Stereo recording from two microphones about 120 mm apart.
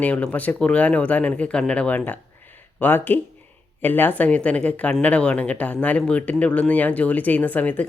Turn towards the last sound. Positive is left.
turn(degrees=15)  # may be behind; listen again after turning